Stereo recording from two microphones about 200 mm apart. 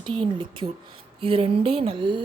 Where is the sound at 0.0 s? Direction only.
25° right (ahead or behind).